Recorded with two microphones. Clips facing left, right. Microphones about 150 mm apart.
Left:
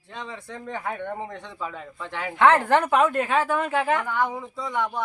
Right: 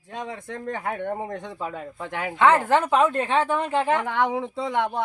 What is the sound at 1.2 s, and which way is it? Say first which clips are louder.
Speech: right 3 dB; 50° right (ahead or behind).